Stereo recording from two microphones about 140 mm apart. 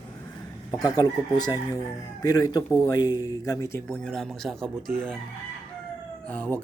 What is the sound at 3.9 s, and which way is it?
Speech, 5° left (ahead or behind).